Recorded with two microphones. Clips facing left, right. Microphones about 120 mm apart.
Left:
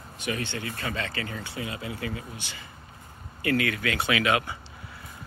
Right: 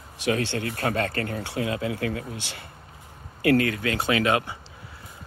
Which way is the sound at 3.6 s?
30° right (ahead or behind).